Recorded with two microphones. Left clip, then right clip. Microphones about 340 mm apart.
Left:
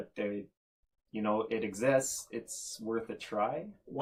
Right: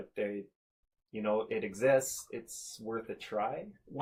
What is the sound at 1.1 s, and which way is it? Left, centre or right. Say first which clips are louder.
Speech: even; right.